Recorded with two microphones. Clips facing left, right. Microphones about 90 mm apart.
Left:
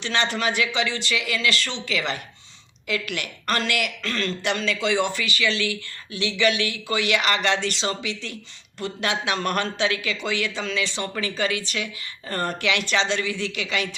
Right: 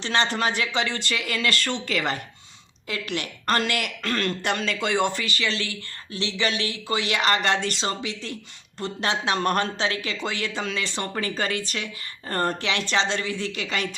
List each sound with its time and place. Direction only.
0.0 s speech: 35° right (ahead or behind)
2.8 s speech: 35° right (ahead or behind)